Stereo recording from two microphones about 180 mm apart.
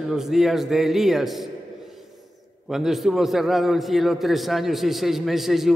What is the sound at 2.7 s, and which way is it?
A man's voice, centre (ahead or behind).